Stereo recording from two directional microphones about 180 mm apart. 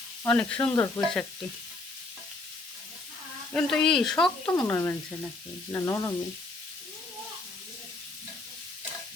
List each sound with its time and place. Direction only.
0.3 s sizzle: 10° left (ahead or behind)
3.5 s speech: 5° left (ahead or behind)
4.6 s sizzle: 10° left (ahead or behind)